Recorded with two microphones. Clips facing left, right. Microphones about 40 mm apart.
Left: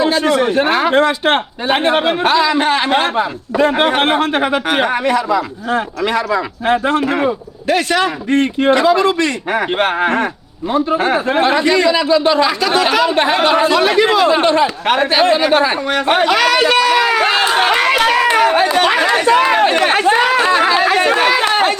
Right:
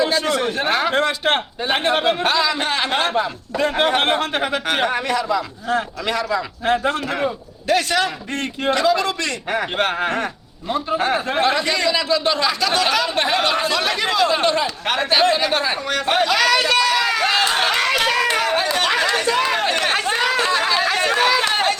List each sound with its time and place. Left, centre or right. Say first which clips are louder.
0.0 s a man's voice: left 5 dB; centre
17.5 s chatter: left 6 dB; left